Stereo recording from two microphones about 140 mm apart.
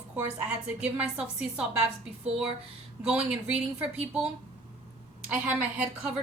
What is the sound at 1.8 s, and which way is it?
Speech, 45° right (ahead or behind).